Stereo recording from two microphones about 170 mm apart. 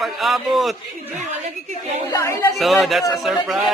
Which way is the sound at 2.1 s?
20° left (ahead or behind).